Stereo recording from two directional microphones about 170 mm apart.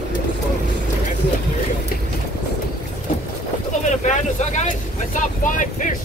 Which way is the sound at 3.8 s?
45° left (ahead or behind).